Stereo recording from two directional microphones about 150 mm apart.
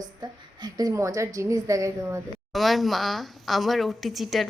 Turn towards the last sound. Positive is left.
turn(degrees=0)  # may be behind; listen again after turning